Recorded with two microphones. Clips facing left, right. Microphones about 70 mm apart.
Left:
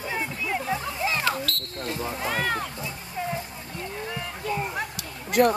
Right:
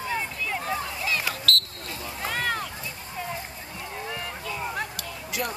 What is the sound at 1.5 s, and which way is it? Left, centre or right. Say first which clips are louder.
Smoke detector: right 7 dB; centre.